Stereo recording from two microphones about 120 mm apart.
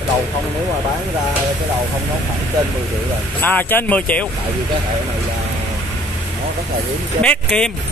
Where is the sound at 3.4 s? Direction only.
15° left (ahead or behind).